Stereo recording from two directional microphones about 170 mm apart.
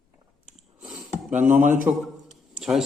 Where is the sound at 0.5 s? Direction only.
Centre (ahead or behind).